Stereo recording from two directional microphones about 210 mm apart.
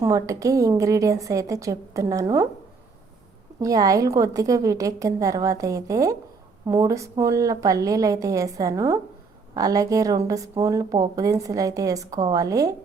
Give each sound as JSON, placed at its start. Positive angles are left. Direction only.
{"t": 0.0, "sound": "a woman's voice", "side_deg": -15}
{"t": 3.6, "sound": "a woman's voice", "side_deg": -15}